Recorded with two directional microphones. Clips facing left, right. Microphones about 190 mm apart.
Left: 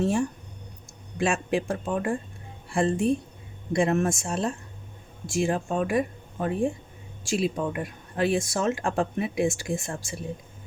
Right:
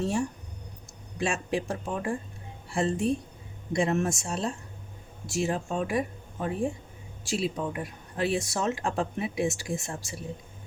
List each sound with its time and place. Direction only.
1.2 s a woman's voice: 55° left (ahead or behind)